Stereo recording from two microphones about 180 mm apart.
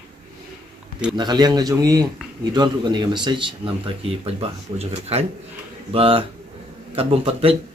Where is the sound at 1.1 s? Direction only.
25° right (ahead or behind).